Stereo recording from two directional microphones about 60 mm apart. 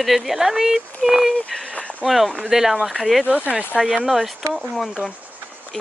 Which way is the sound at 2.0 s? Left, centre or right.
Centre.